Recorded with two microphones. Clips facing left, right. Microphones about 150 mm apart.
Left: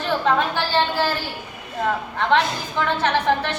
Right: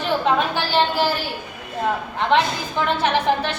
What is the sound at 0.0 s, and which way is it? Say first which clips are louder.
A woman's voice: right 1 dB; 15° right (ahead or behind).